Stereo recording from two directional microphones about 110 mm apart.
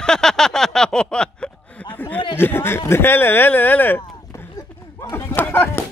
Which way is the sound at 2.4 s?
20° left (ahead or behind).